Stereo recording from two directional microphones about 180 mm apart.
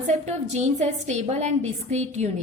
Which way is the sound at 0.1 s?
40° right (ahead or behind).